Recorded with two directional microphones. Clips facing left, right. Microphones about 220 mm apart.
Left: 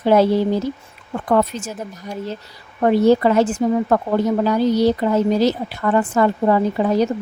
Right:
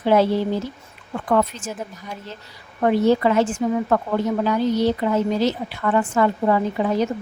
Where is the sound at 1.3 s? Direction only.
40° left (ahead or behind).